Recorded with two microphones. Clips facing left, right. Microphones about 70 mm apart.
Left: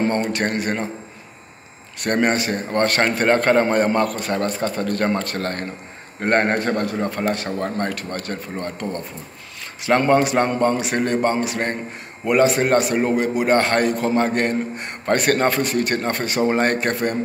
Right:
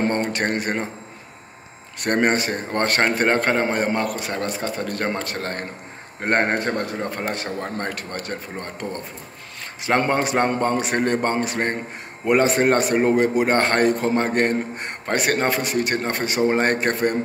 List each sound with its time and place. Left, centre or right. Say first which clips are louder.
0.1 s a man's voice: left 1 dB; right
2.0 s a man's voice: even; right
9.8 s a man's voice: left 4 dB; right
15.0 s a man's voice: left 3 dB; centre